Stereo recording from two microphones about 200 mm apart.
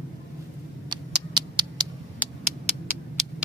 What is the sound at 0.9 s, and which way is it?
Cat, 20° right (ahead or behind).